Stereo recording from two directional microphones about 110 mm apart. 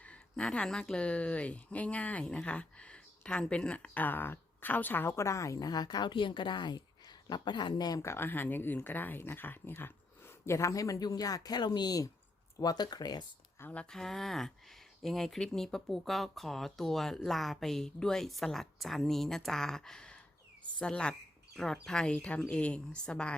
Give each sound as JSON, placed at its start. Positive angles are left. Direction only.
{"t": 0.0, "sound": "speech", "side_deg": 10}
{"t": 13.6, "sound": "speech", "side_deg": 15}
{"t": 13.9, "sound": "speech", "side_deg": 5}